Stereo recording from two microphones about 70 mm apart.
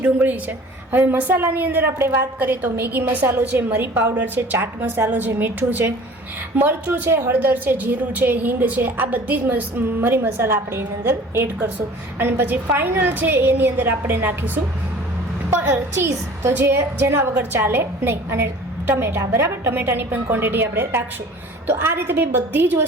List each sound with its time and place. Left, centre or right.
0.0 s a woman's voice: right
16.0 s a woman's voice: right